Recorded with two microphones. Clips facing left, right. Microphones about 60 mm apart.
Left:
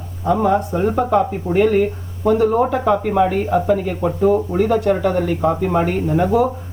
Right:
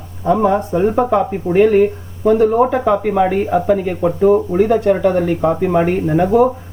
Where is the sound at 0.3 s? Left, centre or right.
Right.